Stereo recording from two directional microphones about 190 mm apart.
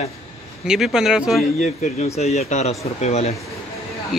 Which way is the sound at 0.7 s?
Centre (ahead or behind).